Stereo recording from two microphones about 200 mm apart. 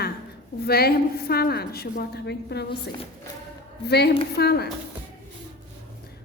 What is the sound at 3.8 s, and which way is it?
Speech, 55° left (ahead or behind).